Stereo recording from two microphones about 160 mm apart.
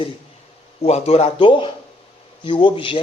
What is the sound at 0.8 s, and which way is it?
Speech, 40° left (ahead or behind).